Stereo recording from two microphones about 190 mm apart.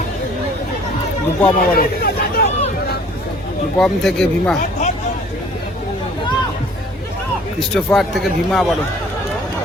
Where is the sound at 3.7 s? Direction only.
5° left (ahead or behind).